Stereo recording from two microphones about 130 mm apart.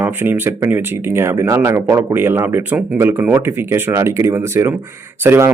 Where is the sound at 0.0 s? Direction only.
15° right (ahead or behind).